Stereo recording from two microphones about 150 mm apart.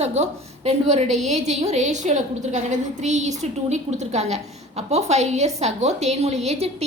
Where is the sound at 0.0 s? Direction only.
45° right (ahead or behind).